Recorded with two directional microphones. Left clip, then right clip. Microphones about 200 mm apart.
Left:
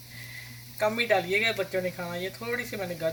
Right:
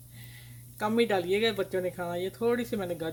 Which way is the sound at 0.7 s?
60° right (ahead or behind).